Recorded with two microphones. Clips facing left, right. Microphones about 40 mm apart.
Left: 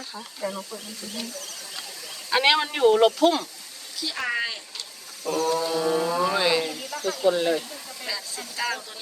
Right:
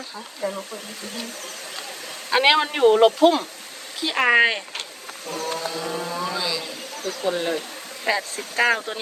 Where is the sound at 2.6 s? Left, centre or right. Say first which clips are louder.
Right 3 dB; right.